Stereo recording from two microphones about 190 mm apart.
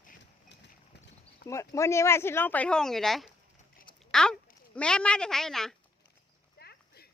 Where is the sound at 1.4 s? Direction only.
15° left (ahead or behind).